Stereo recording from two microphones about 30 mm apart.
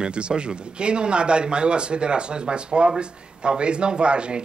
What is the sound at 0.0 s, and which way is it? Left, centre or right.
Speech, right.